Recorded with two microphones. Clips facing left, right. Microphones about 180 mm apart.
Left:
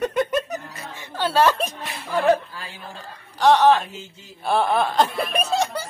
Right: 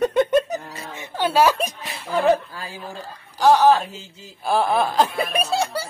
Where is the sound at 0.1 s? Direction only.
30° right (ahead or behind).